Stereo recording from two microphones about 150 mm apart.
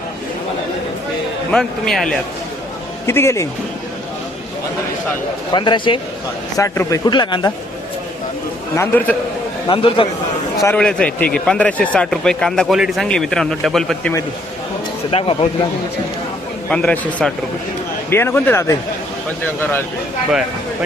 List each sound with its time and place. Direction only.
1.5 s speech: 5° left (ahead or behind)
3.1 s a man's voice: 15° left (ahead or behind)
5.5 s speech: 30° left (ahead or behind)
6.6 s speech: 20° left (ahead or behind)
8.7 s a man's voice: 15° left (ahead or behind)
9.6 s speech: 35° left (ahead or behind)
10.8 s speech: 5° left (ahead or behind)
15.1 s speech: 35° left (ahead or behind)
16.6 s a man's voice: 10° left (ahead or behind)